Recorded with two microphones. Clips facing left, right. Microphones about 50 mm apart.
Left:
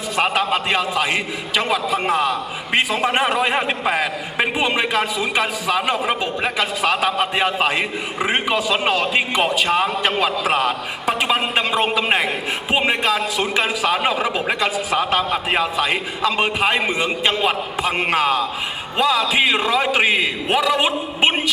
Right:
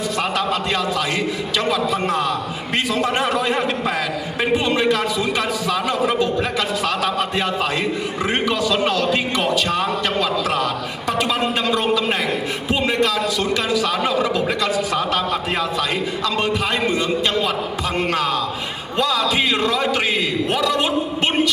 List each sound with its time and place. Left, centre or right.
0.2 s a man's voice: left